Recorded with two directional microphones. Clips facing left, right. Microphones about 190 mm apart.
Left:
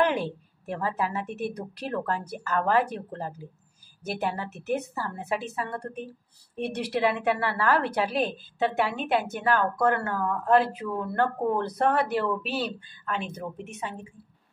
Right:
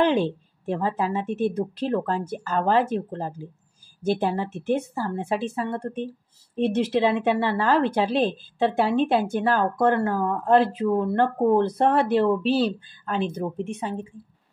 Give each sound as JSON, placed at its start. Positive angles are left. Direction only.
{"t": 0.0, "sound": "a woman's voice", "side_deg": -25}